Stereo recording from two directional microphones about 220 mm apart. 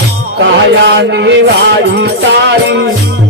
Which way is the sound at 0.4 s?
55° right (ahead or behind).